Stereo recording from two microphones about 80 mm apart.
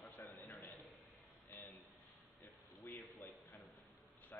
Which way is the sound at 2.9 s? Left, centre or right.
Left.